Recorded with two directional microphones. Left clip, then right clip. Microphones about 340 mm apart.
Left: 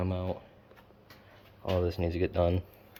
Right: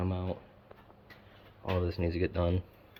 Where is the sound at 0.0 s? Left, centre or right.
Centre.